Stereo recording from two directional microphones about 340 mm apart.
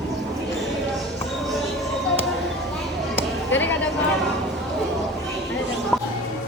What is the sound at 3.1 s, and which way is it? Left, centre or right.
Chop, centre.